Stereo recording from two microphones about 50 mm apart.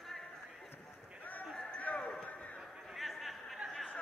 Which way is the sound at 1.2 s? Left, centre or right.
Left.